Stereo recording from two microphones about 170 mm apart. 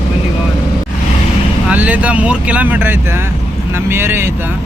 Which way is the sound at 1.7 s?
10° right (ahead or behind).